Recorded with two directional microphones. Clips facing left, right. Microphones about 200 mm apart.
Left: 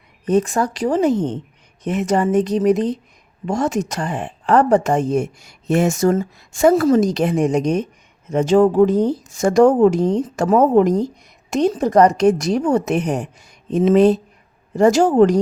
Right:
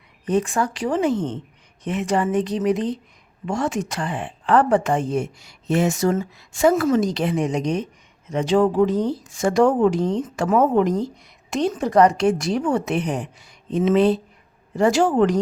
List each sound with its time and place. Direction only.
0.3 s a woman's voice: 40° left (ahead or behind)